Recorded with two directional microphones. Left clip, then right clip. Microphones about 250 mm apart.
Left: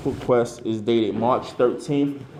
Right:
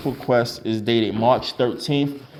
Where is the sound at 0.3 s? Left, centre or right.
Right.